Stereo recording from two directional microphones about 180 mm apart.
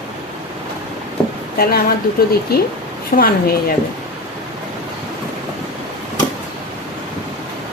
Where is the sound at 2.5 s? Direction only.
60° left (ahead or behind).